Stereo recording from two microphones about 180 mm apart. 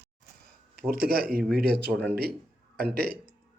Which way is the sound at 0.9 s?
55° right (ahead or behind).